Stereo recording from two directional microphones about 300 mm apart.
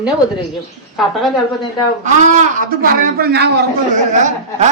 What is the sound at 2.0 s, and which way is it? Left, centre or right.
Speech, right.